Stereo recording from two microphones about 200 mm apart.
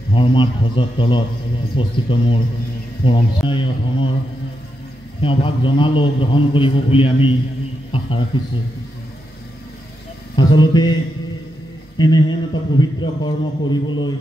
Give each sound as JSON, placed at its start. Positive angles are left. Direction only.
{"t": 0.1, "sound": "a man's voice", "side_deg": 25}
{"t": 5.2, "sound": "a man's voice", "side_deg": 25}
{"t": 10.6, "sound": "a man's voice", "side_deg": 20}
{"t": 12.0, "sound": "a man's voice", "side_deg": 20}